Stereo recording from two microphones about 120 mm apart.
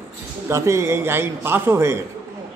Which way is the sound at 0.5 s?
25° right (ahead or behind).